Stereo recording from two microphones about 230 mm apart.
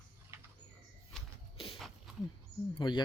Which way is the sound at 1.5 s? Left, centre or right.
Left.